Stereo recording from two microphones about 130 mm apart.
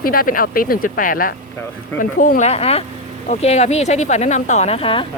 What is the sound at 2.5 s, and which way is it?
Speech, 50° left (ahead or behind).